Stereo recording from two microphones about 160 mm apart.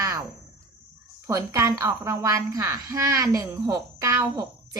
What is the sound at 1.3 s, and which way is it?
A woman's voice, 20° right (ahead or behind).